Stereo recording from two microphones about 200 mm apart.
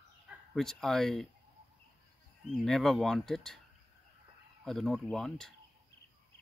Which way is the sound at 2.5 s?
Centre (ahead or behind).